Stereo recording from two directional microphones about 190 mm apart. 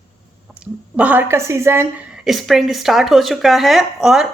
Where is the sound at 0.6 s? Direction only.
5° right (ahead or behind).